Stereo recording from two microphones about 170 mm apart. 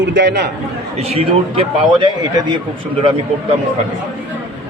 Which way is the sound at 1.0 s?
35° right (ahead or behind).